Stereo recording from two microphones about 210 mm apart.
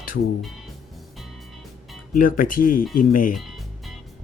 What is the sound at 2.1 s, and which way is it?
Speech, 40° left (ahead or behind).